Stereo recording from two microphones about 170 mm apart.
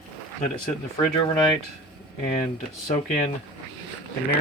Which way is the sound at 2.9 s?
45° left (ahead or behind).